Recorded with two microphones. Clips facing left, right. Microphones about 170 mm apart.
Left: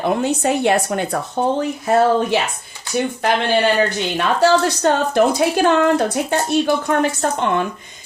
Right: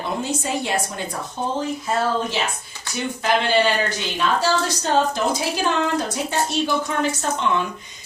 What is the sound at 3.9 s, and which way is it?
A woman's voice, 60° left (ahead or behind).